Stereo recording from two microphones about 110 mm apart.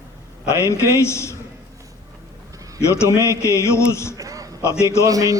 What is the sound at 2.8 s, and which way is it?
A man's voice, 25° left (ahead or behind).